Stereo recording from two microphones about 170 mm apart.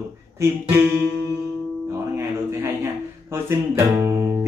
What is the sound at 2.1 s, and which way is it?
Music, 15° right (ahead or behind).